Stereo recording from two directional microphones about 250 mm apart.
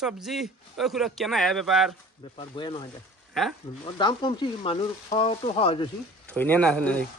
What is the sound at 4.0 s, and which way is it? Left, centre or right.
Speech, centre.